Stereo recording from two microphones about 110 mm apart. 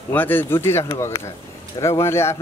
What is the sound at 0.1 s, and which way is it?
Speech, 15° left (ahead or behind).